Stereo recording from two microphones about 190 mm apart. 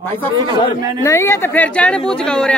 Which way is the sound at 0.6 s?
20° left (ahead or behind).